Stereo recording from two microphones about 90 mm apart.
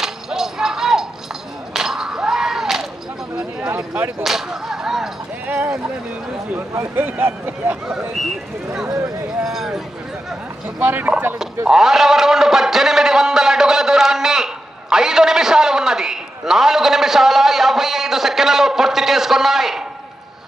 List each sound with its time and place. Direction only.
0.0 s music: 5° right (ahead or behind)
1.7 s a sound: 5° right (ahead or behind)
3.6 s a sound: 20° right (ahead or behind)
4.2 s whip: 5° right (ahead or behind)
5.5 s speech: 15° right (ahead or behind)
6.7 s speech: 25° right (ahead or behind)
9.4 s a man's voice: 5° right (ahead or behind)
10.8 s speech: 20° right (ahead or behind)
11.6 s a man's voice: 5° right (ahead or behind)